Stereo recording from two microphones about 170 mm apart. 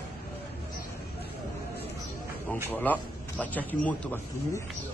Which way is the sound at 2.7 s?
10° left (ahead or behind).